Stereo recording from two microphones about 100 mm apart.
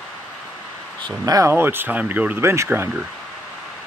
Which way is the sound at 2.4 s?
25° right (ahead or behind).